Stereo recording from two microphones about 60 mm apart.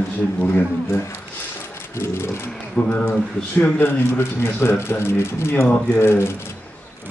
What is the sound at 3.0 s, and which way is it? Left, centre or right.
Speech, left.